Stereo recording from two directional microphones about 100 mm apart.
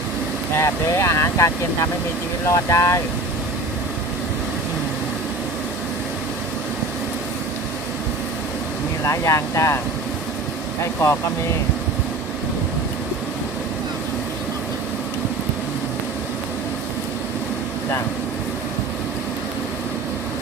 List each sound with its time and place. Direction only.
0.5 s speech: 25° left (ahead or behind)
9.0 s speech: 30° left (ahead or behind)